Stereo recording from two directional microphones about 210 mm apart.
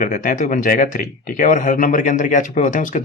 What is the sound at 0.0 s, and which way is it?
Speech, 40° left (ahead or behind).